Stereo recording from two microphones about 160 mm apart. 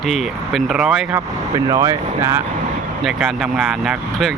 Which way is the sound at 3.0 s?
Centre (ahead or behind).